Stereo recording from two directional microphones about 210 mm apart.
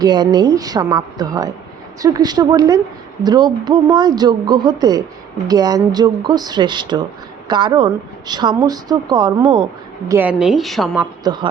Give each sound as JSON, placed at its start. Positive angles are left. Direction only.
{"t": 0.0, "sound": "a woman's voice", "side_deg": -20}
{"t": 10.1, "sound": "a woman's voice", "side_deg": -10}
{"t": 11.2, "sound": "speech", "side_deg": -20}